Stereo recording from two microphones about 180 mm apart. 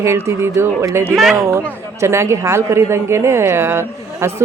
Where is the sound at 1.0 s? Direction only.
Centre (ahead or behind).